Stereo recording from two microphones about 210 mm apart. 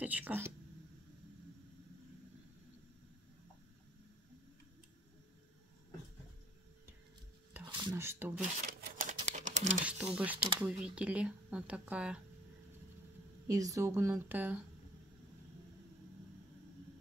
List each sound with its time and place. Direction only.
0.0 s a woman's voice: 10° right (ahead or behind)
7.6 s speech: 15° right (ahead or behind)
8.4 s a sound: 40° right (ahead or behind)
10.1 s speech: 5° right (ahead or behind)
13.5 s a woman's voice: 15° right (ahead or behind)